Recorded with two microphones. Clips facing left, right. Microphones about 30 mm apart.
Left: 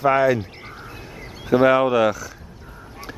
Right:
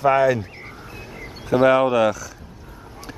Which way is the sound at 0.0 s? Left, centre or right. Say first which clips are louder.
Even; centre.